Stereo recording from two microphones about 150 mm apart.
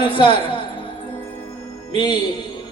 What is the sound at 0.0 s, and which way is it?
Speech, 35° left (ahead or behind).